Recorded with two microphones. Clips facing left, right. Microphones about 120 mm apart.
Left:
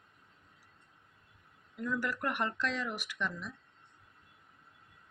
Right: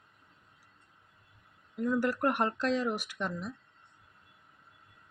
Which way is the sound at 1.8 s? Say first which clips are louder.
Right 6 dB; 40° right (ahead or behind).